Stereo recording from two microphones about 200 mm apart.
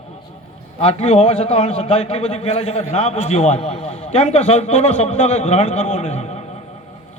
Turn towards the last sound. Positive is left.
turn(degrees=35)  # may be behind; listen again after turning